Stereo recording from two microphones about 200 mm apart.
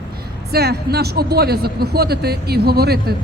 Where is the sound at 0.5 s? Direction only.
50° right (ahead or behind).